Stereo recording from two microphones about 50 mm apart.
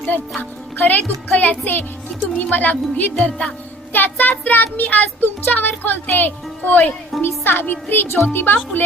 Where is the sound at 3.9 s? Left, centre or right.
Left.